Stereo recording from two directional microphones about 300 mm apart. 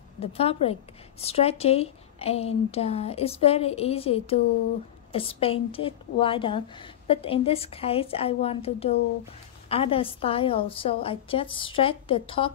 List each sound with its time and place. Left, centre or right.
0.2 s a woman's voice: centre